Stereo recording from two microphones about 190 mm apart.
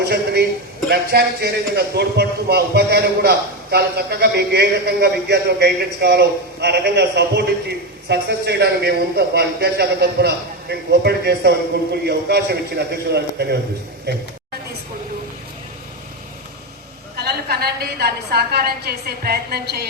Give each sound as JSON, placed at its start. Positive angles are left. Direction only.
{"t": 0.0, "sound": "a sound", "side_deg": -60}
{"t": 0.9, "sound": "a man's voice", "side_deg": -60}
{"t": 17.2, "sound": "a man's voice", "side_deg": -55}